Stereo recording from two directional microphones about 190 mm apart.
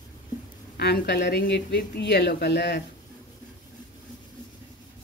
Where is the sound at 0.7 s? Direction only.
60° left (ahead or behind).